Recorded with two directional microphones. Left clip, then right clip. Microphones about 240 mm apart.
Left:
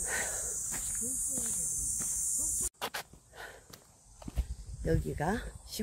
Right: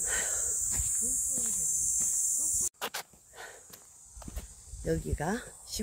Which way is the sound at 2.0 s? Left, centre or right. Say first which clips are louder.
Right 4 dB; centre.